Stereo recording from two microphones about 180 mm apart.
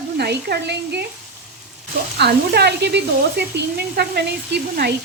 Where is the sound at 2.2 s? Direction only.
65° right (ahead or behind).